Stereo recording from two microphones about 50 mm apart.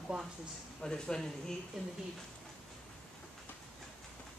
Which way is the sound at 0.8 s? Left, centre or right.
Centre.